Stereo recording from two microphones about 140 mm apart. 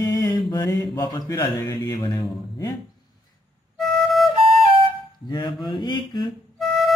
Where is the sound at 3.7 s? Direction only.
Centre (ahead or behind).